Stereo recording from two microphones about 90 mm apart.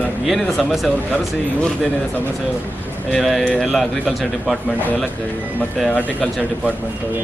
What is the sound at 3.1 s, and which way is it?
Speech, centre (ahead or behind).